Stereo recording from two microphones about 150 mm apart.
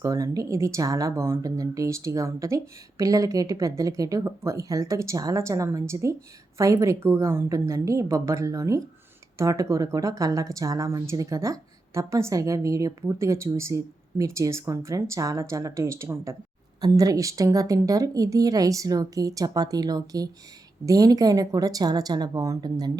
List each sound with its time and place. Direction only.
0.0 s a woman's voice: 20° right (ahead or behind)